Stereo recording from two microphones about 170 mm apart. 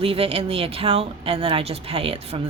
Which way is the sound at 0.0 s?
35° right (ahead or behind).